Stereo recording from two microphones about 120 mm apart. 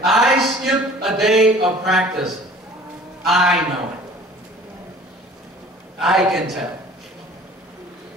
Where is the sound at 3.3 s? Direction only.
5° right (ahead or behind).